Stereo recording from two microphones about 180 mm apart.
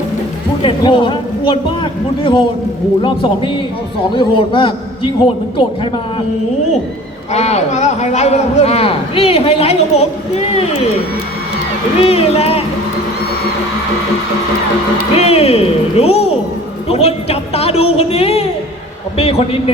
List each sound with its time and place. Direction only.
0.6 s a man's voice: 25° left (ahead or behind)
7.3 s a man's voice: 40° left (ahead or behind)
11.9 s a man's voice: 35° left (ahead or behind)
15.1 s a man's voice: 35° left (ahead or behind)